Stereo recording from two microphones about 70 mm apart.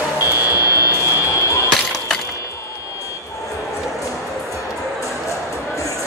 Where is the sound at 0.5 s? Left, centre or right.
Left.